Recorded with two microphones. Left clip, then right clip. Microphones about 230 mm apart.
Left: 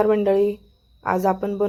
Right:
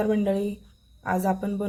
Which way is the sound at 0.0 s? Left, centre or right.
Centre.